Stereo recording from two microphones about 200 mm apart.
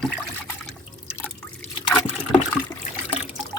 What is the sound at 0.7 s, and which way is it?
Liquid, 5° left (ahead or behind).